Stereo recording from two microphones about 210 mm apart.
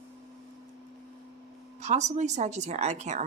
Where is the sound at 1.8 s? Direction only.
35° right (ahead or behind).